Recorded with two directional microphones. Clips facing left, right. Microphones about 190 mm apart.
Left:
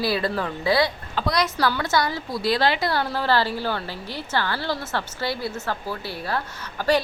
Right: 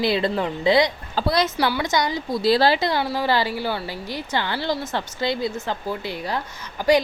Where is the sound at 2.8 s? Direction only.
15° right (ahead or behind).